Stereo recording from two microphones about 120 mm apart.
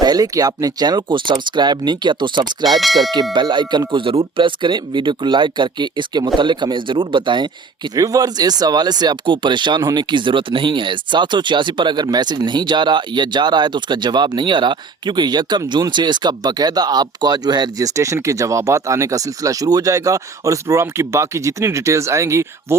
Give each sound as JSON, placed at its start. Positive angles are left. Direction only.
{"t": 0.0, "sound": "speech", "side_deg": -30}
{"t": 2.6, "sound": "speech", "side_deg": 0}
{"t": 3.3, "sound": "speech", "side_deg": -40}
{"t": 7.9, "sound": "speech", "side_deg": -30}